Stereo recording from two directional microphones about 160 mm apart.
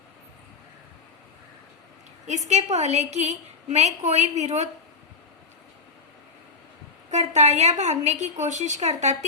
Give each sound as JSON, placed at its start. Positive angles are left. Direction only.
{"t": 2.5, "sound": "a woman's voice", "side_deg": -45}
{"t": 7.1, "sound": "a woman's voice", "side_deg": -45}